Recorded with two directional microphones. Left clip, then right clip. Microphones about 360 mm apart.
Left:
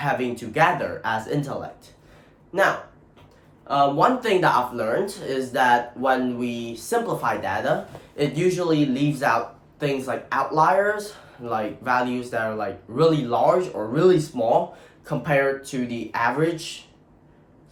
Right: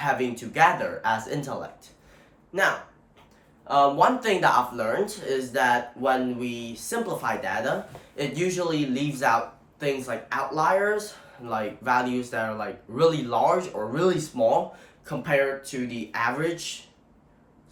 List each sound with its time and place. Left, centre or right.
0.0 s speech: centre
3.7 s speech: centre